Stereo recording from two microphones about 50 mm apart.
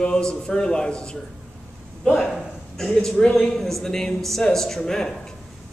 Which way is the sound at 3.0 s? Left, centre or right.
Centre.